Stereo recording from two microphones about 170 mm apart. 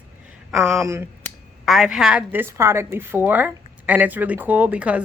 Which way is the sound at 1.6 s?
Centre (ahead or behind).